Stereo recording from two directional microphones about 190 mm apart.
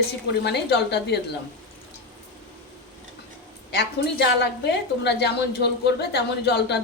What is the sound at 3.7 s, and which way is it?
A woman's voice, 60° left (ahead or behind).